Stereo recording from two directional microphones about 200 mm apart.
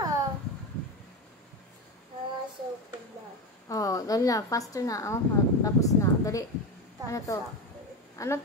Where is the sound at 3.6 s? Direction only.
15° left (ahead or behind).